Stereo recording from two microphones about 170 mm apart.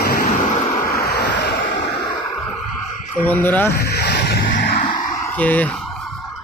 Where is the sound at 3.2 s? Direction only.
10° left (ahead or behind).